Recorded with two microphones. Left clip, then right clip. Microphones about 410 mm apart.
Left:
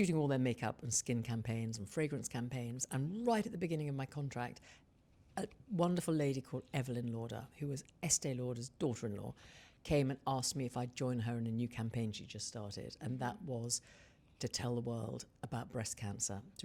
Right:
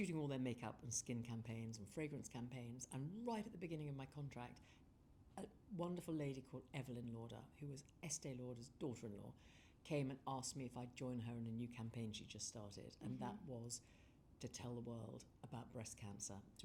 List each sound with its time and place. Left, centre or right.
0.0 s speech: left